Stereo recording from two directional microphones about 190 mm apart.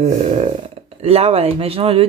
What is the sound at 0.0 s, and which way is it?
Burping, 35° right (ahead or behind).